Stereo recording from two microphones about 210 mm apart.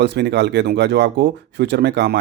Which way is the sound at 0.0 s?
55° right (ahead or behind).